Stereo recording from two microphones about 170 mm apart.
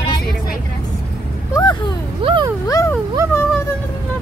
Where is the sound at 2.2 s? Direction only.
30° right (ahead or behind).